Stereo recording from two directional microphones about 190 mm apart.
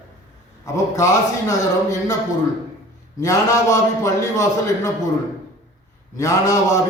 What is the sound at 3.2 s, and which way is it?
A man's voice, 15° left (ahead or behind).